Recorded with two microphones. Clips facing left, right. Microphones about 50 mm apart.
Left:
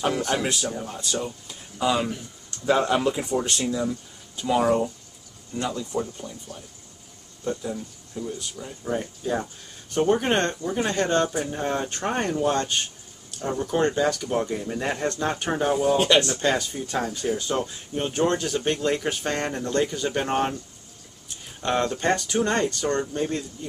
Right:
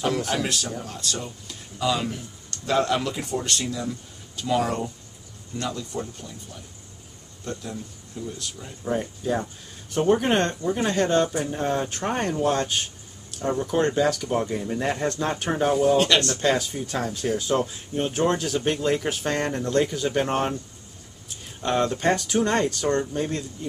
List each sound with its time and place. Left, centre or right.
0.4 s speech: centre
6.2 s speech: left
7.4 s speech: centre
8.8 s speech: centre
16.3 s speech: centre
21.6 s speech: centre